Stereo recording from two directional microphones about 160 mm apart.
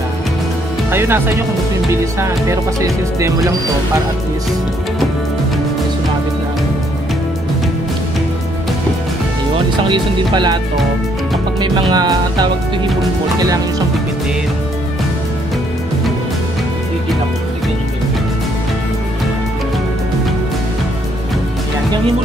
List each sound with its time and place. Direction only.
0.9 s speech: 15° right (ahead or behind)
9.8 s music: 30° right (ahead or behind)
11.6 s music: 30° right (ahead or behind)